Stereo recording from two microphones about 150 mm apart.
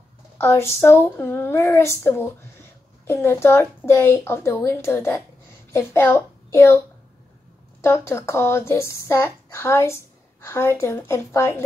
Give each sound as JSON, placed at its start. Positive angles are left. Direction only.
{"t": 0.4, "sound": "a child's voice", "side_deg": 20}
{"t": 7.8, "sound": "speech", "side_deg": 15}